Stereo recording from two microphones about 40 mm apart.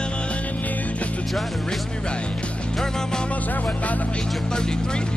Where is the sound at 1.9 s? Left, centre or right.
Left.